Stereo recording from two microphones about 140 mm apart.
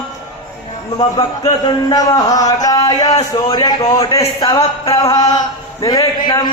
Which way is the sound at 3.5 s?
30° left (ahead or behind).